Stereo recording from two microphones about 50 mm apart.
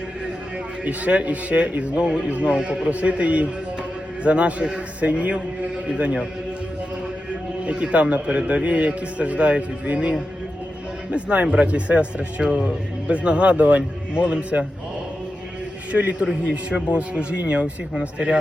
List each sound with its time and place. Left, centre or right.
0.9 s a man's voice: right
7.6 s a man's voice: right
12.4 s a man's voice: centre
15.9 s a man's voice: right